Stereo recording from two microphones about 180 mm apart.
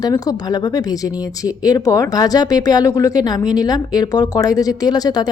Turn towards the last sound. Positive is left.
turn(degrees=20)  # may be behind; listen again after turning